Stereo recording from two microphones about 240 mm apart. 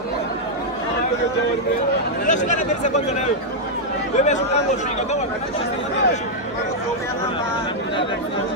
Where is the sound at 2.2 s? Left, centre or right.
Left.